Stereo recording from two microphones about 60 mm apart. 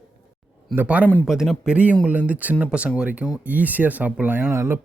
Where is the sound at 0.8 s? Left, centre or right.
Right.